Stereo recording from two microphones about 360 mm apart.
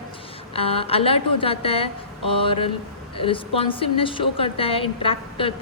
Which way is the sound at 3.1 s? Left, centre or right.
Centre.